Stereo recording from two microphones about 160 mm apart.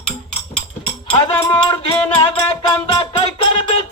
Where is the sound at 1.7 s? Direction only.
35° left (ahead or behind).